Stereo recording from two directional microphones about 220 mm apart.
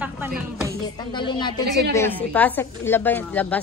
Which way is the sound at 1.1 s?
20° left (ahead or behind).